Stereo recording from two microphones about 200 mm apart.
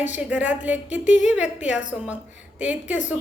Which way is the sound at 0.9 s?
35° left (ahead or behind).